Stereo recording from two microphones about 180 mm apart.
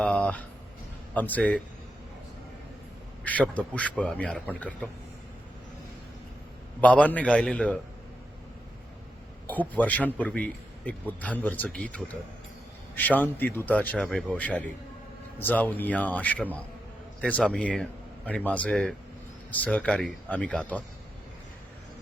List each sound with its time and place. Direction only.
0.0 s a sound: 5° left (ahead or behind)
1.1 s speech: 10° left (ahead or behind)
3.2 s speech: 10° left (ahead or behind)
6.8 s speech: 10° left (ahead or behind)
9.5 s a man's voice: 10° left (ahead or behind)